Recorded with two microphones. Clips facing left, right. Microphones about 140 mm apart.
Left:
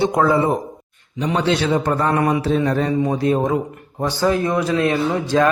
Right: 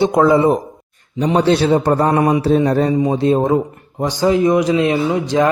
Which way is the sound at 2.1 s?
20° right (ahead or behind).